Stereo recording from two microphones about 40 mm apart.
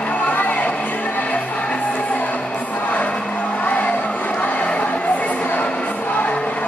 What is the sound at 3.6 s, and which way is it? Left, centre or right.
Music, left.